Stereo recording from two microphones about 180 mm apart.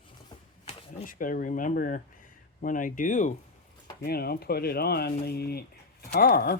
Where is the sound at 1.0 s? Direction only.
50° left (ahead or behind).